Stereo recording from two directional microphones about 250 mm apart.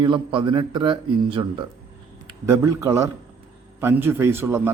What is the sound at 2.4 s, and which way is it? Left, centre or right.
A man's voice, centre.